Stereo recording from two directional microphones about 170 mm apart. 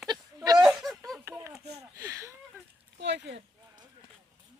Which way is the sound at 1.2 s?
15° right (ahead or behind).